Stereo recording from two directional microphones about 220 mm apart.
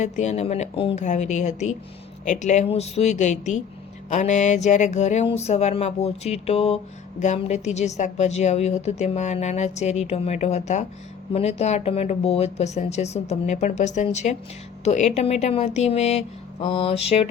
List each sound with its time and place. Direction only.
0.0 s a woman's voice: 30° left (ahead or behind)